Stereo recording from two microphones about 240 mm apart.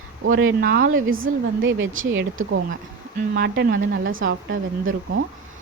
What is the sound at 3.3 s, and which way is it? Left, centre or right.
A woman's voice, right.